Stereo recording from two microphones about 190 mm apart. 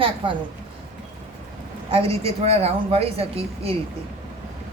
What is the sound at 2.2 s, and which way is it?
Speech, 30° right (ahead or behind).